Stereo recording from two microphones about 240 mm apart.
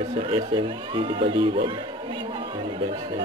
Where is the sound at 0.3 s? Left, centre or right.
Right.